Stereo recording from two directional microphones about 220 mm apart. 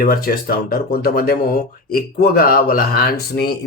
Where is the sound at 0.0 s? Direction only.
40° left (ahead or behind).